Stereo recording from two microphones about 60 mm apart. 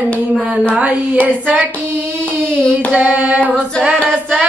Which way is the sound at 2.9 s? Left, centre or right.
Right.